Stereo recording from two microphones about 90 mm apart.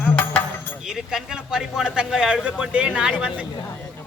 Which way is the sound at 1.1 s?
5° right (ahead or behind).